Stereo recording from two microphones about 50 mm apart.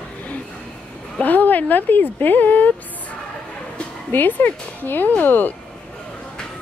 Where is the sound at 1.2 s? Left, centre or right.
Left.